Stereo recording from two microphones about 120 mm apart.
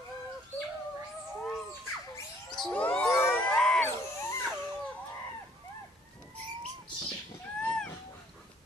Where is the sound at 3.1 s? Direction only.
20° left (ahead or behind).